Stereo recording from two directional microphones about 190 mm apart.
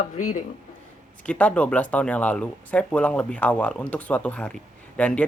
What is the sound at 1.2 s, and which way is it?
Speech, 5° left (ahead or behind).